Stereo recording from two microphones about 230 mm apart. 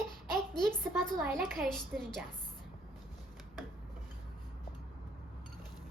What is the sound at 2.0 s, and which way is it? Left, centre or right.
Speech, centre.